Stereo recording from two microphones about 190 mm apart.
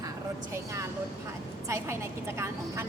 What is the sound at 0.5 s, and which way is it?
A woman's voice, 15° right (ahead or behind).